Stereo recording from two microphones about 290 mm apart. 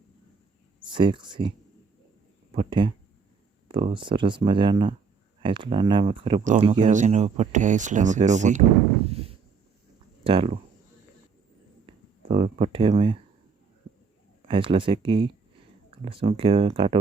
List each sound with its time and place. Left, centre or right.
0.8 s speech: centre
2.5 s speech: centre
9.0 s a sound: right
10.2 s speech: centre
12.3 s speech: right
14.4 s speech: centre